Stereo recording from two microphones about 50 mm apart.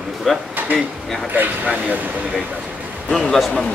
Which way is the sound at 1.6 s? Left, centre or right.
Right.